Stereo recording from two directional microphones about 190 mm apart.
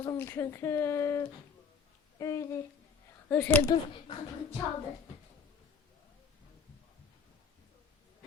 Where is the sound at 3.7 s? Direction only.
25° left (ahead or behind).